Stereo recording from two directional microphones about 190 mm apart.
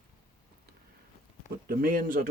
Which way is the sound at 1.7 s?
50° right (ahead or behind).